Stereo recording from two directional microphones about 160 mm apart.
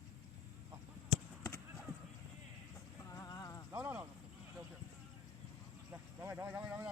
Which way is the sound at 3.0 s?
20° left (ahead or behind).